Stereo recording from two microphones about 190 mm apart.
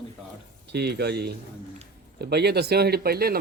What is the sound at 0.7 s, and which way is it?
Speech, 60° right (ahead or behind).